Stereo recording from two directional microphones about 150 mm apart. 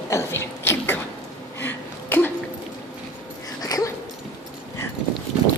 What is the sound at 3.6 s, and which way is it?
Dog, 25° left (ahead or behind).